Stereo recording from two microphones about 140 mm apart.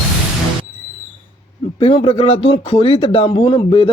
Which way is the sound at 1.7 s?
40° left (ahead or behind).